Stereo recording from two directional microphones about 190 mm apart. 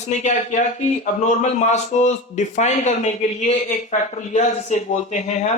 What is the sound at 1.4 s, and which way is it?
A man's voice, 35° left (ahead or behind).